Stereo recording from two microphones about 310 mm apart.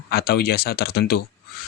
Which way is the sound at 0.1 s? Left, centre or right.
Left.